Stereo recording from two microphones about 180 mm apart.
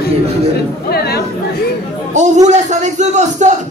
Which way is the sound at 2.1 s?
40° right (ahead or behind).